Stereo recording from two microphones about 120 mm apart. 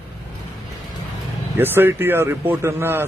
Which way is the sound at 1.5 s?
15° right (ahead or behind).